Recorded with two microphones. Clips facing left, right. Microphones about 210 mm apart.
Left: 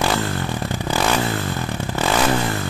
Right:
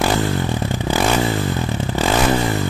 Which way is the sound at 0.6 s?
15° right (ahead or behind).